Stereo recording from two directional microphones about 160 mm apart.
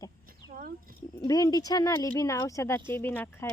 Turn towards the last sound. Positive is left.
turn(degrees=10)  # may be behind; listen again after turning